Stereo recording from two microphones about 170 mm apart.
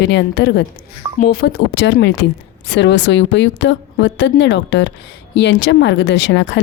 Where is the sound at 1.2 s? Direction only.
65° left (ahead or behind).